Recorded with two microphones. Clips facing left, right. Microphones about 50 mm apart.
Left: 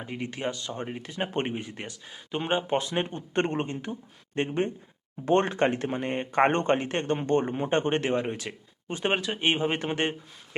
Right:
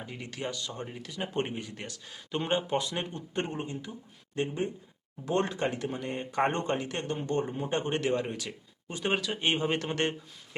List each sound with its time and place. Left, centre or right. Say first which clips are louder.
0.0 s speech: left 5 dB; left
2.6 s speech: left 4 dB; left
3.3 s speech: left 7 dB; left; by 10.2 s centre